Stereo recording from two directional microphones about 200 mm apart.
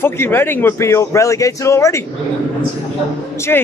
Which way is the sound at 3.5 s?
10° left (ahead or behind).